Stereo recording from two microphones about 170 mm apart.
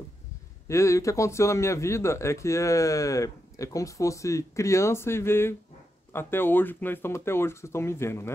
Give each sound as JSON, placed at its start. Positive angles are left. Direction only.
{"t": 0.7, "sound": "speech", "side_deg": 15}